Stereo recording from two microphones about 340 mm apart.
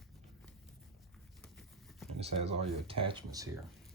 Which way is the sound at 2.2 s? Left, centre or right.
Centre.